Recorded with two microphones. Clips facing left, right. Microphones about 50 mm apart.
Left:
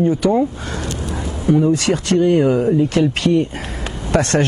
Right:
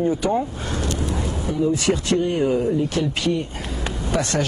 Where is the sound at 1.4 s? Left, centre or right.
Left.